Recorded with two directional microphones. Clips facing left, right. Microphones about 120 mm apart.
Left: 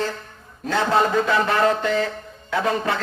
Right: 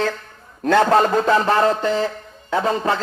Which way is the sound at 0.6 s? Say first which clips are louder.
Right 5 dB; 50° right (ahead or behind).